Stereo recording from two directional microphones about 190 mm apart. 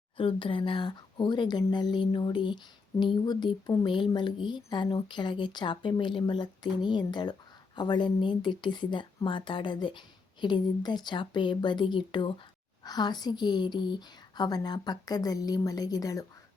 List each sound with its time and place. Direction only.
0.2 s speech: 25° left (ahead or behind)